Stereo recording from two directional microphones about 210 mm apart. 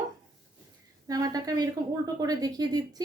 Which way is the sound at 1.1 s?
15° right (ahead or behind).